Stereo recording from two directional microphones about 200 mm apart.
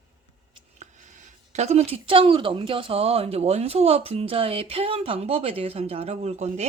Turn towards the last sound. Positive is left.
turn(degrees=-35)  # may be behind; listen again after turning